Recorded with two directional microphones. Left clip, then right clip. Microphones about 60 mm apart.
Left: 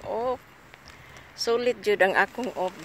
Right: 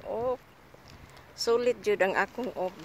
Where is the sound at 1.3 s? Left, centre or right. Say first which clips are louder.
Left 1 dB; centre.